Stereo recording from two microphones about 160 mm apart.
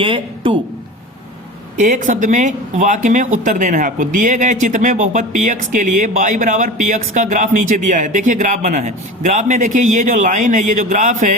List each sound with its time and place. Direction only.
0.0 s speech: 30° right (ahead or behind)
1.8 s speech: 50° right (ahead or behind)